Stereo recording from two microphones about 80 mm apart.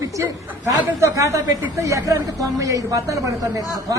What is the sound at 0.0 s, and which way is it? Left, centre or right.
Chatter, right.